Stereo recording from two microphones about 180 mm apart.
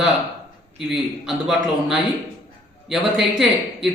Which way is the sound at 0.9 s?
5° right (ahead or behind).